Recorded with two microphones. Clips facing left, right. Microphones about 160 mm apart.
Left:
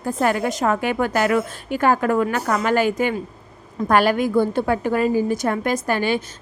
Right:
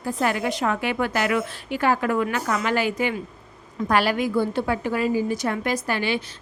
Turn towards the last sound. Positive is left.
turn(degrees=45)  # may be behind; listen again after turning